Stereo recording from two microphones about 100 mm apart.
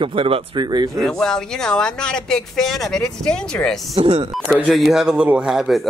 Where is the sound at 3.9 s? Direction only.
80° right.